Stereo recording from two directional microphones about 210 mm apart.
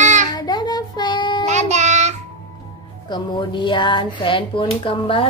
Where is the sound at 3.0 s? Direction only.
20° left (ahead or behind).